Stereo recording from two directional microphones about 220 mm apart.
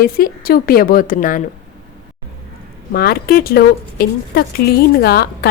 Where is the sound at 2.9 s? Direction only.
45° left (ahead or behind).